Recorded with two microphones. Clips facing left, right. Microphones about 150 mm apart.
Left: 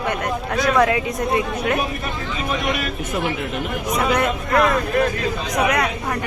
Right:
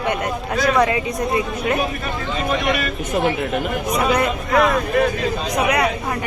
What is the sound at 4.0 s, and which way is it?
A woman's voice, centre (ahead or behind).